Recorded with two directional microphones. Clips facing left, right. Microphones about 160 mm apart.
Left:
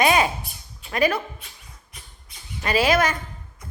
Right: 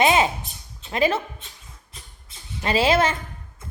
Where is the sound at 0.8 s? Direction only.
25° right (ahead or behind).